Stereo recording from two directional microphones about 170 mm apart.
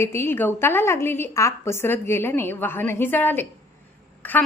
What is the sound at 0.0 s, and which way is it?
A woman's voice, 15° left (ahead or behind).